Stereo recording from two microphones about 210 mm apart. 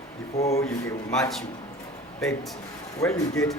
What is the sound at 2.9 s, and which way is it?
Speech, 15° left (ahead or behind).